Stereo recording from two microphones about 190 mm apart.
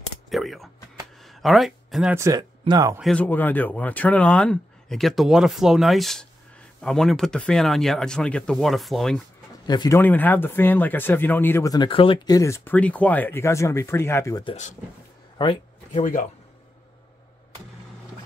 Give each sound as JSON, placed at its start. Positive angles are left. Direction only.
{"t": 0.3, "sound": "speech", "side_deg": 0}
{"t": 1.2, "sound": "a sound", "side_deg": 0}
{"t": 2.1, "sound": "speech", "side_deg": -15}
{"t": 3.0, "sound": "speech", "side_deg": 5}
{"t": 9.7, "sound": "speech", "side_deg": 20}
{"t": 9.9, "sound": "speech", "side_deg": 10}
{"t": 14.4, "sound": "speech", "side_deg": 35}
{"t": 15.3, "sound": "a sound", "side_deg": 30}
{"t": 16.0, "sound": "speech", "side_deg": 40}